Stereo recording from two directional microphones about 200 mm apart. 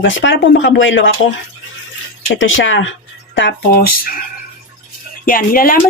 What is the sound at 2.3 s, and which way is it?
Speech, 75° left (ahead or behind).